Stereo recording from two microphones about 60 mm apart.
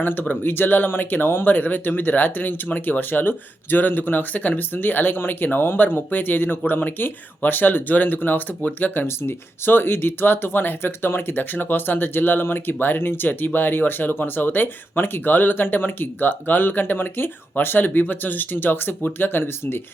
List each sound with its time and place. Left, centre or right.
0.0 s speech: left